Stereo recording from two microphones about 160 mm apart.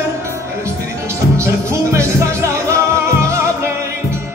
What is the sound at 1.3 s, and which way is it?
Music, 15° right (ahead or behind).